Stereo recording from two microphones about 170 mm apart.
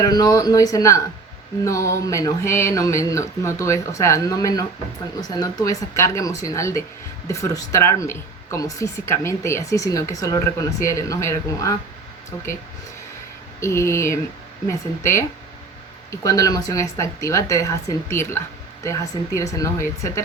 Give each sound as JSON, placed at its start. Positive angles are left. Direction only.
{"t": 0.0, "sound": "a woman's voice", "side_deg": 25}
{"t": 13.6, "sound": "a sound", "side_deg": 15}
{"t": 16.2, "sound": "a woman's voice", "side_deg": 20}